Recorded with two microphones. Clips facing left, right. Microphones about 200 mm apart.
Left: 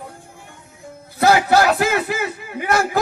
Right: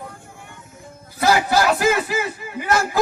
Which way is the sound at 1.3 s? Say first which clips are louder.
Left 2 dB; 55° left (ahead or behind).